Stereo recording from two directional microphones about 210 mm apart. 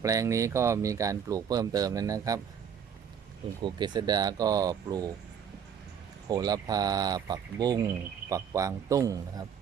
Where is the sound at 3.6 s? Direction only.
20° right (ahead or behind).